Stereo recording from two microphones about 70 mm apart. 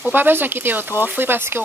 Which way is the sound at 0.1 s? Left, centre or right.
Right.